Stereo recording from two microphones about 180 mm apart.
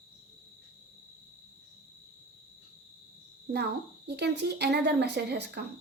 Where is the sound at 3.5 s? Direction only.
65° right (ahead or behind).